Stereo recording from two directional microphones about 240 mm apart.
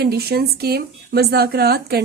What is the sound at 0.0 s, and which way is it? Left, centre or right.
A woman's voice, right.